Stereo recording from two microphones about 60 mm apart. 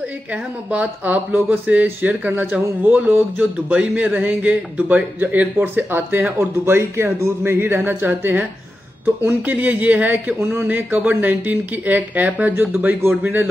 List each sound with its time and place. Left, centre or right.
0.3 s speech: right
6.6 s a woman's voice: right